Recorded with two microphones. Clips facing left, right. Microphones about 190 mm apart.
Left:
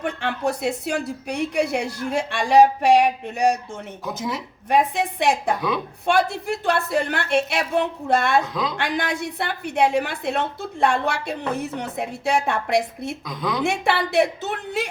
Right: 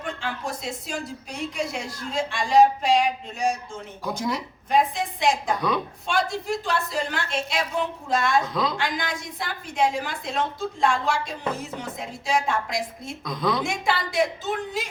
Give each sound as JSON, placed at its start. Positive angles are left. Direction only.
{"t": 0.0, "sound": "a woman's voice", "side_deg": 65}
{"t": 4.0, "sound": "speech", "side_deg": 5}
{"t": 4.7, "sound": "a woman's voice", "side_deg": 65}
{"t": 5.5, "sound": "speech", "side_deg": 5}
{"t": 6.1, "sound": "a woman's voice", "side_deg": 65}
{"t": 8.5, "sound": "speech", "side_deg": 0}
{"t": 8.8, "sound": "a woman's voice", "side_deg": 65}
{"t": 13.2, "sound": "speech", "side_deg": 0}
{"t": 13.7, "sound": "a woman's voice", "side_deg": 65}